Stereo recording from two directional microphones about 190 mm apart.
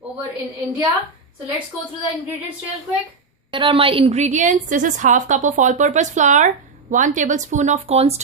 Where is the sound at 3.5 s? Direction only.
25° right (ahead or behind).